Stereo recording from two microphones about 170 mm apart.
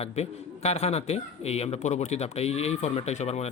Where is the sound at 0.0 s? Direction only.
40° left (ahead or behind).